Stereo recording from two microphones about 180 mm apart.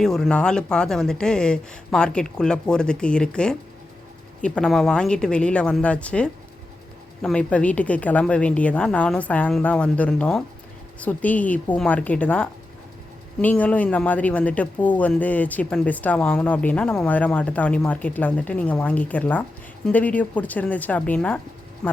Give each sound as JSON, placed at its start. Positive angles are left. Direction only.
{"t": 0.0, "sound": "speech", "side_deg": 5}